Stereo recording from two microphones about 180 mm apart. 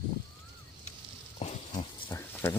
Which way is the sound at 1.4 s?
35° left (ahead or behind).